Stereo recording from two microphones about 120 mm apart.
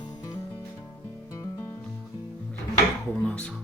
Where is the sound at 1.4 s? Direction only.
20° left (ahead or behind).